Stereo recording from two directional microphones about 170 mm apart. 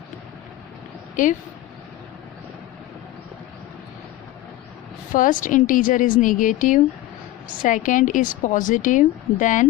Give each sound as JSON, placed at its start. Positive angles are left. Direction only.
{"t": 1.1, "sound": "speech", "side_deg": 50}
{"t": 5.1, "sound": "a woman's voice", "side_deg": 50}